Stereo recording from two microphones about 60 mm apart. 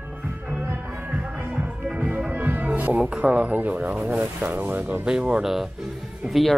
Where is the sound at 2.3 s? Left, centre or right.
Right.